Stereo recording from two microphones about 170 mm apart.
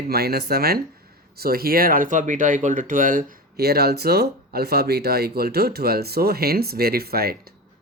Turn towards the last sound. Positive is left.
turn(degrees=-65)  # may be behind; listen again after turning